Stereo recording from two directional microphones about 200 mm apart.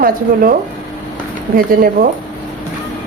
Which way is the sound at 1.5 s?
45° right (ahead or behind).